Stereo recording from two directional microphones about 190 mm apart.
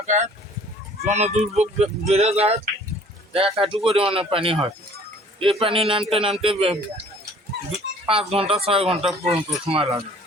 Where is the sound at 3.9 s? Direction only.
30° right (ahead or behind).